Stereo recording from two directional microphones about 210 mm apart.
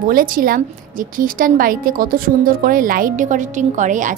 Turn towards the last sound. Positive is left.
turn(degrees=-35)  # may be behind; listen again after turning